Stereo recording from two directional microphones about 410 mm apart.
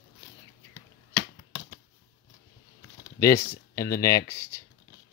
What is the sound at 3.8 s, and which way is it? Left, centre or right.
Speech, centre.